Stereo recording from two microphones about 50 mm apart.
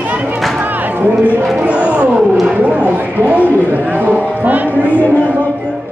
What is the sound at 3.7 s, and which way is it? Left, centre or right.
A man's voice, right.